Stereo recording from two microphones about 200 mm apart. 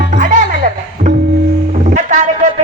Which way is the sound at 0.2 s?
40° right (ahead or behind).